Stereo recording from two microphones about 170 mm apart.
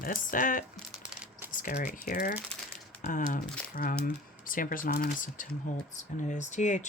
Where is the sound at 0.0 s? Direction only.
55° left (ahead or behind).